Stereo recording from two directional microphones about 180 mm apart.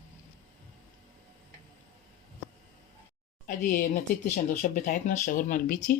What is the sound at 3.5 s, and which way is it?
Speech, 45° left (ahead or behind).